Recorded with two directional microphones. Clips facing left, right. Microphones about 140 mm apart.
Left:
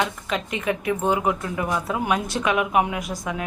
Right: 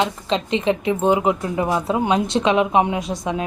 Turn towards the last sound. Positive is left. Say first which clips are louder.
# right 4 dB
turn(degrees=-25)  # may be behind; listen again after turning